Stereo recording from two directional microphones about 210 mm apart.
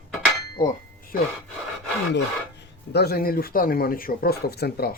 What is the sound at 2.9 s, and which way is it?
Speech, 50° left (ahead or behind).